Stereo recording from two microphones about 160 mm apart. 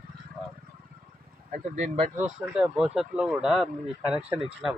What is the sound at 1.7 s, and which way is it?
Speech, 45° right (ahead or behind).